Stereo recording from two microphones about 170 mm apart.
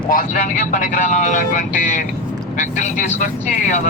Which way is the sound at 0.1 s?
55° left (ahead or behind).